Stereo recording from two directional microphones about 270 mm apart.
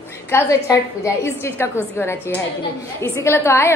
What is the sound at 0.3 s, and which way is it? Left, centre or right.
A woman's voice, centre.